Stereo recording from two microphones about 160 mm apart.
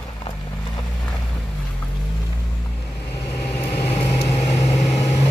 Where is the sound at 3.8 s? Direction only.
40° left (ahead or behind).